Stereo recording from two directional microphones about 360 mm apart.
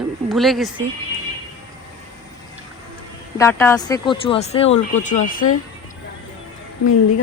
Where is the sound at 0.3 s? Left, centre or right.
Centre.